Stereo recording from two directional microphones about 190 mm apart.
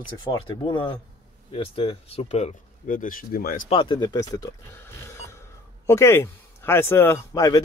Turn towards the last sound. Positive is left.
turn(degrees=20)  # may be behind; listen again after turning